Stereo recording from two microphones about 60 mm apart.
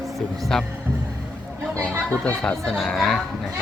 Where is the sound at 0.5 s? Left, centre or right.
Centre.